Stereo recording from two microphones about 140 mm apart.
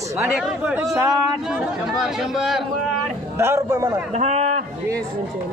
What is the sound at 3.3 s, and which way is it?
Speech, 20° right (ahead or behind).